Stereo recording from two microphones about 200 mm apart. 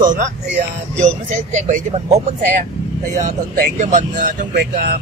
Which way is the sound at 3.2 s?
40° right (ahead or behind).